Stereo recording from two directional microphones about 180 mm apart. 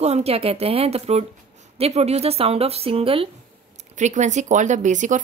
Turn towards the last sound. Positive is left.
turn(degrees=-45)  # may be behind; listen again after turning